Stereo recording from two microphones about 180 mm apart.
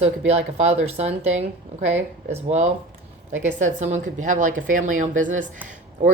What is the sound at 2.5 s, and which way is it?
A woman's voice, 40° right (ahead or behind).